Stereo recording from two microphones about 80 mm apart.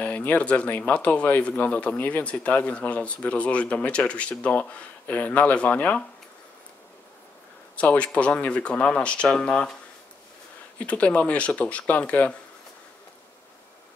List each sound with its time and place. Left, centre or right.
0.0 s speech: centre
7.7 s speech: centre
10.9 s speech: centre